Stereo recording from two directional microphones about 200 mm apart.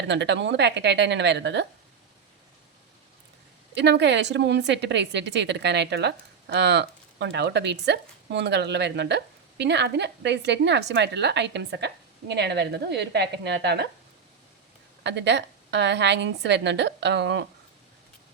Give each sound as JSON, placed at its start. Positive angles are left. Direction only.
{"t": 0.1, "sound": "a woman's voice", "side_deg": -60}
{"t": 3.8, "sound": "a woman's voice", "side_deg": -60}
{"t": 15.0, "sound": "a woman's voice", "side_deg": -60}